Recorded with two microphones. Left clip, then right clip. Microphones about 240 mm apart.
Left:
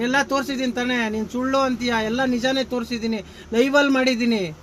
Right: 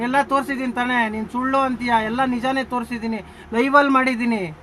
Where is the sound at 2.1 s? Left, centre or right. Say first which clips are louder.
Right 1 dB; right.